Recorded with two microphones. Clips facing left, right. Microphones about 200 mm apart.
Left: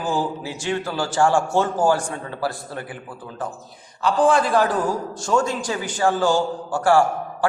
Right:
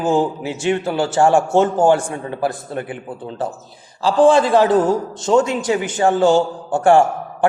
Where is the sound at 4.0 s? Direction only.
25° right (ahead or behind).